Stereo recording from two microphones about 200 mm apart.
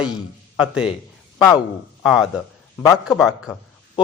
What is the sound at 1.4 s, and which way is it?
Speech, 15° left (ahead or behind).